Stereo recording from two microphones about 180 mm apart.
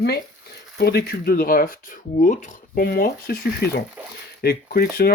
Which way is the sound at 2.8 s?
55° left (ahead or behind).